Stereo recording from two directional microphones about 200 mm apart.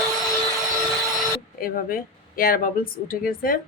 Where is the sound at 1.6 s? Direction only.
45° left (ahead or behind).